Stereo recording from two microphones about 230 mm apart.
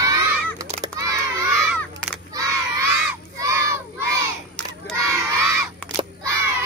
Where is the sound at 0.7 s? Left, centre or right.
Centre.